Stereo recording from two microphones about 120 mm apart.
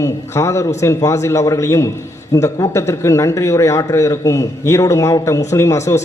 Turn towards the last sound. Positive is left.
turn(degrees=25)  # may be behind; listen again after turning